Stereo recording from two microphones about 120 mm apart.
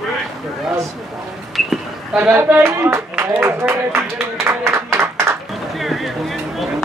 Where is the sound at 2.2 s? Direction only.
15° right (ahead or behind).